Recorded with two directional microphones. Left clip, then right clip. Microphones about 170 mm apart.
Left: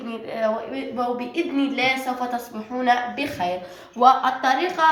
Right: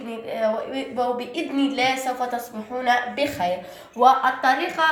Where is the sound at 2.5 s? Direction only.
25° right (ahead or behind).